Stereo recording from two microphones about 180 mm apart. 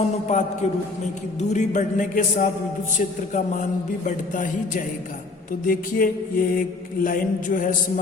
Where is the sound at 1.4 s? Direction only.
40° left (ahead or behind).